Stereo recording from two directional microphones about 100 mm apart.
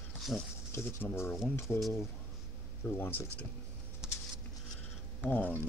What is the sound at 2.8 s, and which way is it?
Speech, 20° left (ahead or behind).